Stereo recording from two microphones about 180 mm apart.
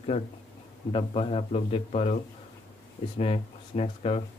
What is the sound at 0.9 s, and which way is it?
Speech, 30° left (ahead or behind).